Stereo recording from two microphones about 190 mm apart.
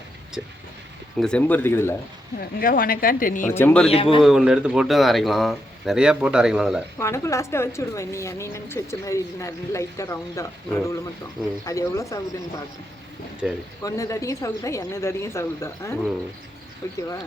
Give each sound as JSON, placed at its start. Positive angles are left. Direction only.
{"t": 1.2, "sound": "a woman's voice", "side_deg": 5}
{"t": 2.4, "sound": "speech", "side_deg": 50}
{"t": 3.4, "sound": "a woman's voice", "side_deg": 10}
{"t": 3.8, "sound": "speech", "side_deg": 30}
{"t": 4.2, "sound": "speech", "side_deg": 0}
{"t": 7.0, "sound": "a woman's voice", "side_deg": 15}
{"t": 13.4, "sound": "speech", "side_deg": 0}
{"t": 13.8, "sound": "a woman's voice", "side_deg": 15}